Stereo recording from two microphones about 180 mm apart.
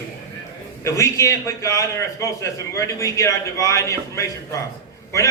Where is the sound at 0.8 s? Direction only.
15° left (ahead or behind).